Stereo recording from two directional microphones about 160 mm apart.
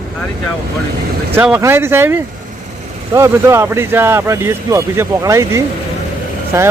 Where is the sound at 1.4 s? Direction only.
10° right (ahead or behind).